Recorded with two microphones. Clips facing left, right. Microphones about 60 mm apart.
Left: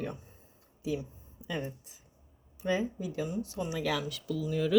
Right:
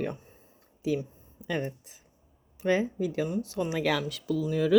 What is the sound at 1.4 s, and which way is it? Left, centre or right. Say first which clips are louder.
Speech: right 5 dB; right.